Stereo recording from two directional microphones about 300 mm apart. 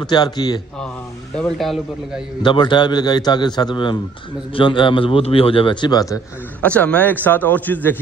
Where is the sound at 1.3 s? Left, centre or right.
Centre.